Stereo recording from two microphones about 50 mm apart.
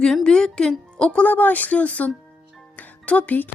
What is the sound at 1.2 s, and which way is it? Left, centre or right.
Speech, left.